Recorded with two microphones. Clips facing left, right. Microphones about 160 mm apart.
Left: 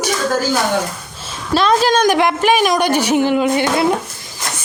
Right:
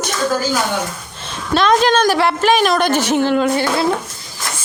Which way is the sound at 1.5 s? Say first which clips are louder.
Even; 5° left (ahead or behind).